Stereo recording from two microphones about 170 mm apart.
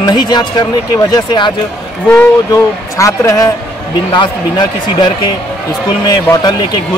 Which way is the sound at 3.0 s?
20° left (ahead or behind).